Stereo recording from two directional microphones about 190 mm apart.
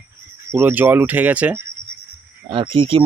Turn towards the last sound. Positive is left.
turn(degrees=-30)  # may be behind; listen again after turning